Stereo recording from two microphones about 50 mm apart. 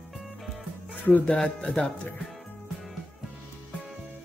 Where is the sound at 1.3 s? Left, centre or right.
Left.